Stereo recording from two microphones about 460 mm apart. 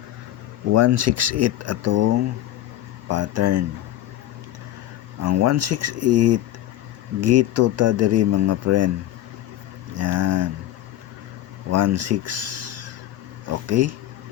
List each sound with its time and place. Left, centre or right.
0.7 s speech: right
5.2 s speech: right
10.0 s speech: right
11.7 s speech: right